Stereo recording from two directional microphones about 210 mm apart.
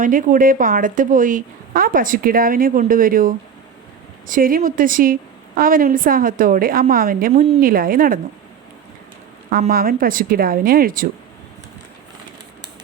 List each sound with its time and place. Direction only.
0.0 s a woman's voice: 40° right (ahead or behind)
9.5 s a woman's voice: 45° right (ahead or behind)